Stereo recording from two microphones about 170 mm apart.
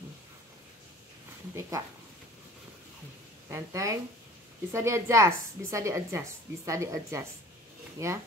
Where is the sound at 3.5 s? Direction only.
20° right (ahead or behind).